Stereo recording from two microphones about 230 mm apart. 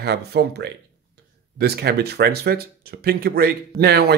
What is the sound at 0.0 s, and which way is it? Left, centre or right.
Speech, right.